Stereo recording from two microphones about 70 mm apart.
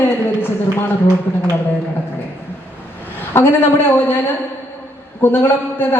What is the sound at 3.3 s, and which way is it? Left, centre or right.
Speech, left.